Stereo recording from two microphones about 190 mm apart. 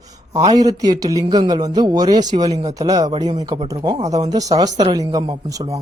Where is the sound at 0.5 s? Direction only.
20° right (ahead or behind).